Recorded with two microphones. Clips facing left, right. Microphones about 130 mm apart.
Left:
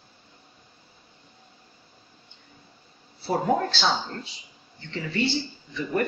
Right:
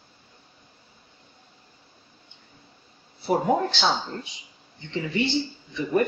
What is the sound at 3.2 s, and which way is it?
Speech, 15° right (ahead or behind).